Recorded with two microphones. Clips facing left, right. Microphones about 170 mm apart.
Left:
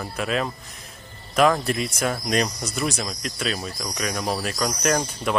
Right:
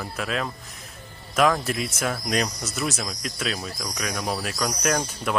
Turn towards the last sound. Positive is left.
turn(degrees=0)  # may be behind; listen again after turning